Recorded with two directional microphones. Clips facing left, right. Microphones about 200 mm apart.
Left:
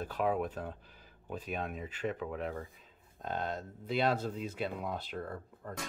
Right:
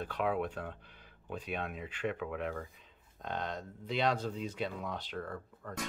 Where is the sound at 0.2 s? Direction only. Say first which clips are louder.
Left 1 dB; 40° left (ahead or behind).